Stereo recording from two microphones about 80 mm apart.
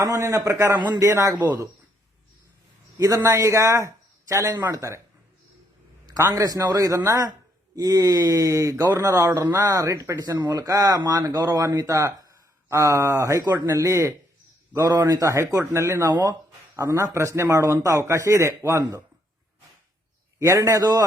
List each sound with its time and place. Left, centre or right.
0.0 s a man's voice: right
3.0 s a man's voice: right
6.3 s speech: right
13.5 s a man's voice: right
16.1 s speech: right
16.7 s a man's voice: right
20.4 s a man's voice: right